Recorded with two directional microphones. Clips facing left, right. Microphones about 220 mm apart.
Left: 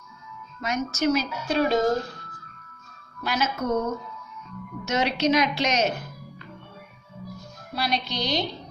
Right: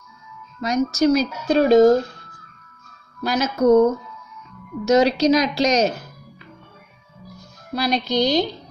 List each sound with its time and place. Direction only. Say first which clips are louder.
0.6 s speech: right 8 dB; 35° right (ahead or behind)
3.3 s speech: right 10 dB; 40° right (ahead or behind)
4.8 s speech: right 8 dB; 35° right (ahead or behind)
7.7 s speech: right 8 dB; 40° right (ahead or behind)